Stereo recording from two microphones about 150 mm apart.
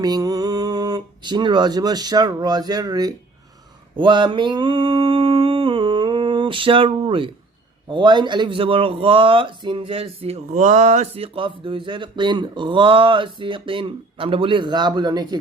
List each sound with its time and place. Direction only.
0.0 s speech: 25° right (ahead or behind)
3.9 s a sound: 30° right (ahead or behind)
7.9 s speech: 30° right (ahead or behind)